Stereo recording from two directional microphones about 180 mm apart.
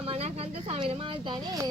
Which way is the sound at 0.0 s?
35° right (ahead or behind).